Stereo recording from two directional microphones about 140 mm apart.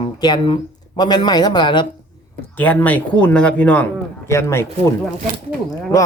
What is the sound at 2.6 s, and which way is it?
A man's voice, 10° left (ahead or behind).